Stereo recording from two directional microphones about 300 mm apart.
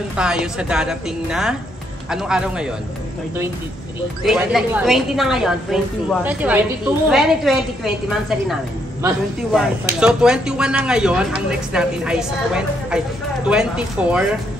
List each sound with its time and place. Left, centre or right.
0.1 s speech: centre
4.2 s speech: centre